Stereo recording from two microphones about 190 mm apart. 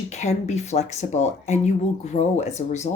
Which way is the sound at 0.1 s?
35° left (ahead or behind).